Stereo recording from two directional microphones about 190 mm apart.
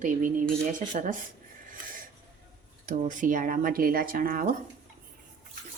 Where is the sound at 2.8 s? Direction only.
40° right (ahead or behind).